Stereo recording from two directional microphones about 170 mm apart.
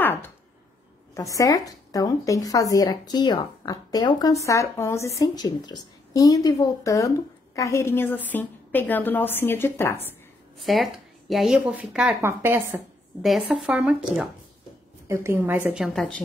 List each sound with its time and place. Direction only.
0.0 s a sound: 10° left (ahead or behind)
1.1 s a woman's voice: 20° left (ahead or behind)
10.6 s speech: centre (ahead or behind)
12.2 s a woman's voice: 15° right (ahead or behind)
13.2 s speech: centre (ahead or behind)
15.0 s a woman's voice: 15° right (ahead or behind); by 16.3 s 5° left (ahead or behind)